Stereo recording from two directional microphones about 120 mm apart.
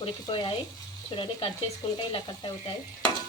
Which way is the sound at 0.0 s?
45° left (ahead or behind).